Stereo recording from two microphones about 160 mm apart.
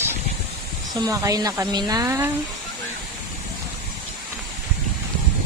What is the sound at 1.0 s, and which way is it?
Speech, 20° right (ahead or behind).